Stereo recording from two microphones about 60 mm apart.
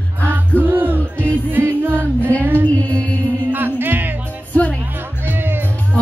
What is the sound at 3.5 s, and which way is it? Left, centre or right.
Music, right.